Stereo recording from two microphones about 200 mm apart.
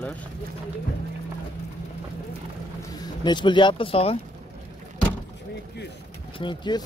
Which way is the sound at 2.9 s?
20° left (ahead or behind).